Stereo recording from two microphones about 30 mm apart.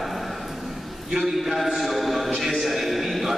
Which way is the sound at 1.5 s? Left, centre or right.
Centre.